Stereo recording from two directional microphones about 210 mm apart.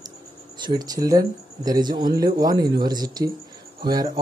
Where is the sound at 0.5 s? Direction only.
20° right (ahead or behind).